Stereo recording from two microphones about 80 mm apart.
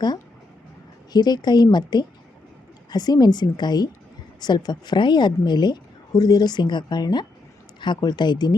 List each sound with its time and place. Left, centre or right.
1.1 s a woman's voice: left